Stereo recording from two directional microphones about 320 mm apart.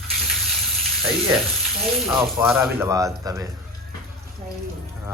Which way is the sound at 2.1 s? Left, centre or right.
Centre.